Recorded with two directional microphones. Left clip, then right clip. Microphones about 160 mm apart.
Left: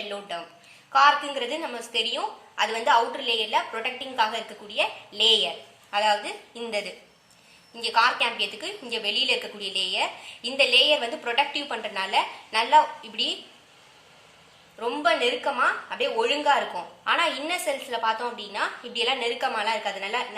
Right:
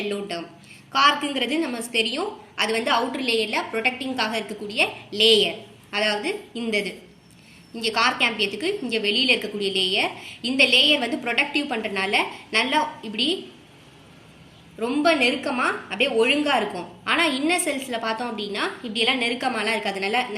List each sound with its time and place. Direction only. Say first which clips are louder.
0.1 s a woman's voice: right 4 dB; 50° left (ahead or behind)
14.8 s a woman's voice: right 3 dB; 50° left (ahead or behind)